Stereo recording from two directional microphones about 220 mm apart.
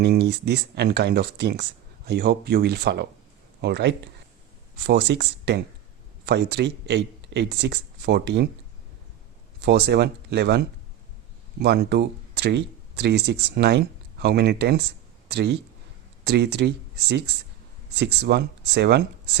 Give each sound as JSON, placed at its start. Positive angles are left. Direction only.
{"t": 0.0, "sound": "speech", "side_deg": -50}
{"t": 9.6, "sound": "speech", "side_deg": -50}
{"t": 11.6, "sound": "speech", "side_deg": -50}